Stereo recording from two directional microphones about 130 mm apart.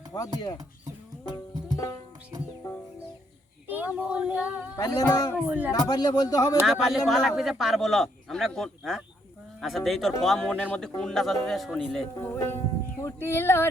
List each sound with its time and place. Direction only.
0.1 s speech: 30° left (ahead or behind)
3.7 s child singing: 10° right (ahead or behind)
4.8 s speech: 25° left (ahead or behind)
5.4 s speech: 10° right (ahead or behind)
5.9 s speech: 30° left (ahead or behind)
6.7 s a man's voice: centre (ahead or behind)
12.2 s speech: 15° left (ahead or behind)